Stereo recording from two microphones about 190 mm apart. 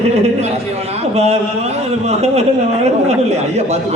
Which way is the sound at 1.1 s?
35° right (ahead or behind).